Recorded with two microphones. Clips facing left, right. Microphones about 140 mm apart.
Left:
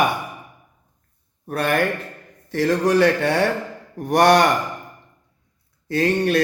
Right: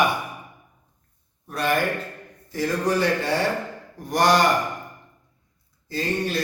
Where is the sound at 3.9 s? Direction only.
65° left (ahead or behind).